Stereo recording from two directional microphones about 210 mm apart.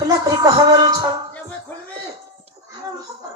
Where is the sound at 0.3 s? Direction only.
15° right (ahead or behind).